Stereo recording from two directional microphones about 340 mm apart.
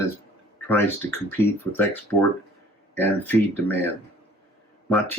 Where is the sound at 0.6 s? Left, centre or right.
Centre.